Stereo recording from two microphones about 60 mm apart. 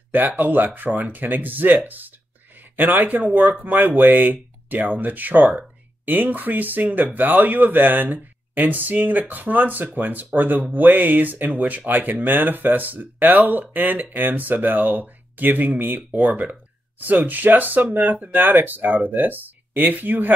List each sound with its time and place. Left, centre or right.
0.1 s speech: right